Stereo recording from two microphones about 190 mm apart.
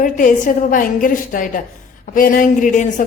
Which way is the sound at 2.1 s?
45° left (ahead or behind).